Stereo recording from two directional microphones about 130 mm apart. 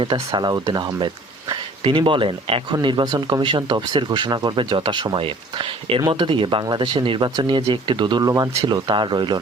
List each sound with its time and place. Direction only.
0.0 s speech: 40° right (ahead or behind)